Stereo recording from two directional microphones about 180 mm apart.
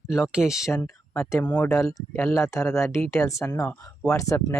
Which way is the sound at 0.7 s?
15° left (ahead or behind).